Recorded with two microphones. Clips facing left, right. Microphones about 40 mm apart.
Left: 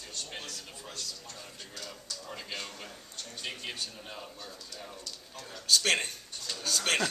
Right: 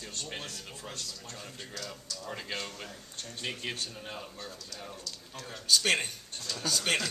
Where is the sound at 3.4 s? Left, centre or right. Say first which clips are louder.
Right 2 dB; centre.